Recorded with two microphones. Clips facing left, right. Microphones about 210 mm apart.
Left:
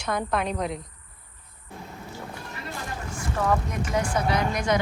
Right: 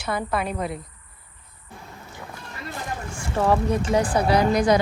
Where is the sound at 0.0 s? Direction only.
5° right (ahead or behind).